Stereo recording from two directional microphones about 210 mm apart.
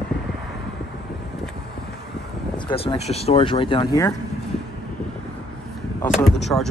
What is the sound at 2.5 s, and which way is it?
Speech, 25° left (ahead or behind).